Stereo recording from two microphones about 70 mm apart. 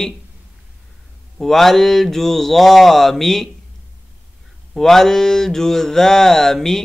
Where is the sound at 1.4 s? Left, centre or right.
Centre.